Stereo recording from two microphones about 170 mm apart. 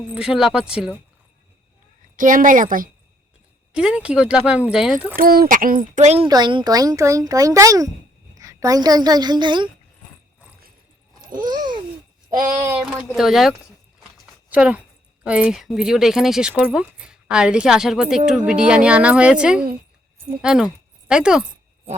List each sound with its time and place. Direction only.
0.1 s a woman's voice: 5° right (ahead or behind)
2.1 s speech: 50° right (ahead or behind)
3.7 s a woman's voice: 5° right (ahead or behind)
5.1 s speech: 60° right (ahead or behind); by 6.2 s 40° right (ahead or behind)
6.2 s a woman's voice: 25° right (ahead or behind)
12.8 s a woman's voice: 5° right (ahead or behind)